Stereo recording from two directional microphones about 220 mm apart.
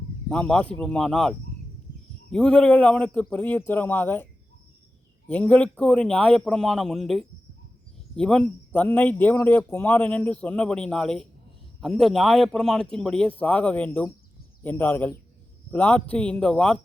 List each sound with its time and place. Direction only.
0.3 s a man's voice: 5° left (ahead or behind)
2.3 s a man's voice: 5° left (ahead or behind)
5.3 s a man's voice: 5° left (ahead or behind)